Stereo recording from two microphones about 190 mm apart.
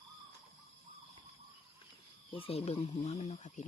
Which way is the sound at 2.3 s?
30° left (ahead or behind).